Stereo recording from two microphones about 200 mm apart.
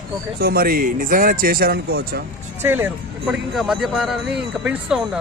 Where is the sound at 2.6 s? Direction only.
10° right (ahead or behind).